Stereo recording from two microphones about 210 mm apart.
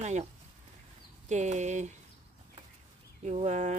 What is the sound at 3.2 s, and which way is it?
Speech, 35° right (ahead or behind).